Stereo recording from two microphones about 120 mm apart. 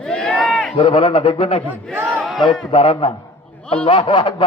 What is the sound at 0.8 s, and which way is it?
Speech, 50° left (ahead or behind).